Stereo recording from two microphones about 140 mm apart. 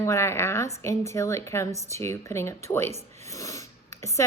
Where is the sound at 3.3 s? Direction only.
25° left (ahead or behind).